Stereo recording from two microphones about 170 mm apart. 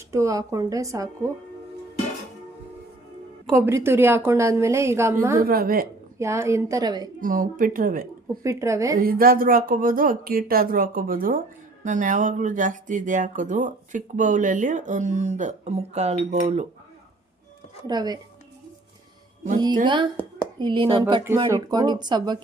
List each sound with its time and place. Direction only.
0.1 s speech: 20° right (ahead or behind)
3.5 s a woman's voice: 15° right (ahead or behind)
5.4 s speech: 60° right (ahead or behind)
6.1 s a woman's voice: 15° right (ahead or behind)
7.2 s speech: 55° right (ahead or behind)
8.4 s a woman's voice: 15° right (ahead or behind)
9.0 s speech: 60° right (ahead or behind); by 16.6 s 45° right (ahead or behind)
17.8 s speech: 25° right (ahead or behind)
19.8 s speech: 25° right (ahead or behind)